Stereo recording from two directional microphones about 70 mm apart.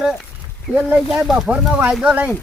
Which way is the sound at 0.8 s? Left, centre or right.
Centre.